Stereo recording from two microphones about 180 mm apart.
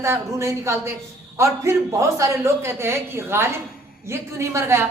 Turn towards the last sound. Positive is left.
turn(degrees=-15)  # may be behind; listen again after turning